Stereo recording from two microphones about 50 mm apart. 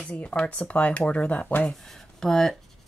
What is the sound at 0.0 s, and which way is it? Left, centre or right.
Speech, left.